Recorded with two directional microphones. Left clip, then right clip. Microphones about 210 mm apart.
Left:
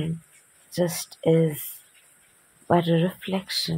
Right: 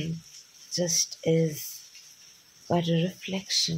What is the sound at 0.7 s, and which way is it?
Speech, 15° left (ahead or behind).